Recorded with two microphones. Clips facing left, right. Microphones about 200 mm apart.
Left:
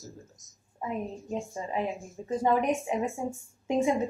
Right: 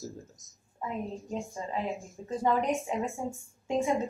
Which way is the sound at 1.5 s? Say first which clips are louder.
Left 2 dB; 15° left (ahead or behind).